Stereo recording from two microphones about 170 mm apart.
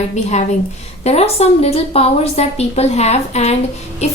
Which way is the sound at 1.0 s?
40° left (ahead or behind).